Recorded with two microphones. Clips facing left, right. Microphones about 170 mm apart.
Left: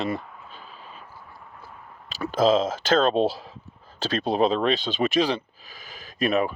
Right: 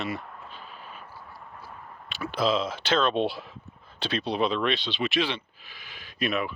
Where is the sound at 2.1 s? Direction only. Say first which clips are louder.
Left 6 dB; 40° left (ahead or behind).